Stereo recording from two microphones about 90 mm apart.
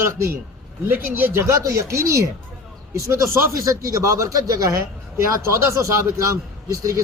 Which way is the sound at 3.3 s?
30° right (ahead or behind).